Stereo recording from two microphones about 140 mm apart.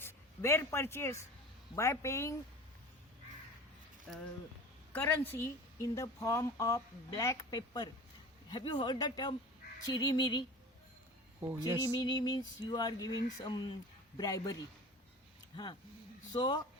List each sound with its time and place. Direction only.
0.0 s a man's voice: 20° left (ahead or behind)
4.9 s a woman's voice: 15° left (ahead or behind); by 10.4 s 30° left (ahead or behind)
11.3 s speech: 20° right (ahead or behind)
11.8 s speech: 30° left (ahead or behind)
16.3 s speech: 30° left (ahead or behind)